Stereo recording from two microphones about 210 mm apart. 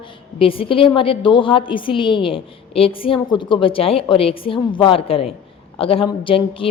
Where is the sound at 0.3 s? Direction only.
25° left (ahead or behind).